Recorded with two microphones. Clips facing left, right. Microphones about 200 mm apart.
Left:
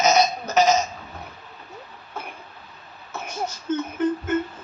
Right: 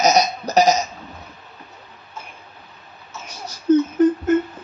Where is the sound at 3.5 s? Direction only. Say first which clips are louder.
Right 13 dB; 35° right (ahead or behind).